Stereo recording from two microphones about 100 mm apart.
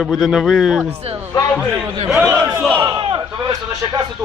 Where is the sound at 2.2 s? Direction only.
25° right (ahead or behind).